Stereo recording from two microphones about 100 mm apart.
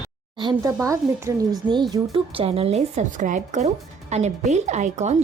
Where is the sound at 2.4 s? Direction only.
75° right (ahead or behind).